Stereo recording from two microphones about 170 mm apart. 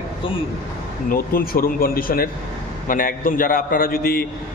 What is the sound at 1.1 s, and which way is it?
A man's voice, 60° left (ahead or behind).